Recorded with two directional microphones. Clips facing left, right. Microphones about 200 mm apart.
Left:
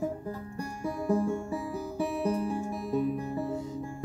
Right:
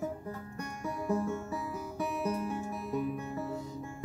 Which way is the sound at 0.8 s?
30° left (ahead or behind).